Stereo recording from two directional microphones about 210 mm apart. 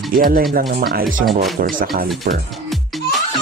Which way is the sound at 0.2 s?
45° right (ahead or behind).